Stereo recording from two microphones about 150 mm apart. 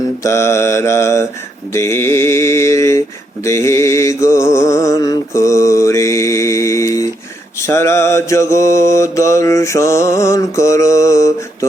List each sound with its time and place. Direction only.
0.2 s mantra: 20° left (ahead or behind)